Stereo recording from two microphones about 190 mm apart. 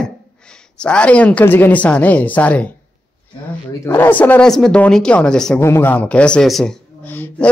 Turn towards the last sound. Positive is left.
turn(degrees=10)  # may be behind; listen again after turning